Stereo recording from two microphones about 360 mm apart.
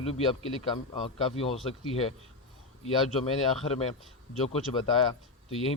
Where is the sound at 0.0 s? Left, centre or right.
Centre.